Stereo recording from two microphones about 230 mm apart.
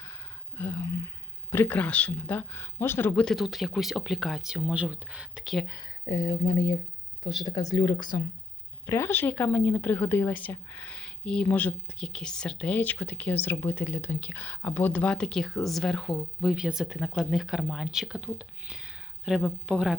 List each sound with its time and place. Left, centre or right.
0.5 s speech: centre
5.6 s a woman's voice: centre